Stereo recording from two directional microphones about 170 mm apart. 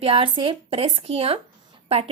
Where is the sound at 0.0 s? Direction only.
30° right (ahead or behind).